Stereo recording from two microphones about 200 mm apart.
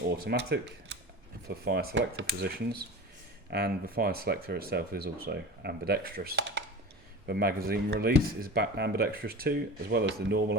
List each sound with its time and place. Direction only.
0.3 s speech: 55° right (ahead or behind)